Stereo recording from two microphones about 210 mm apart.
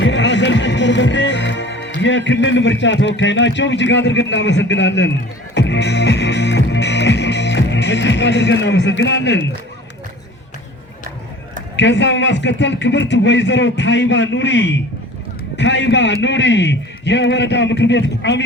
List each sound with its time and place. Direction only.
0.0 s music: 60° left (ahead or behind)
3.2 s a man's voice: 60° left (ahead or behind)
5.5 s music: 55° left (ahead or behind)
11.8 s a man's voice: 55° left (ahead or behind)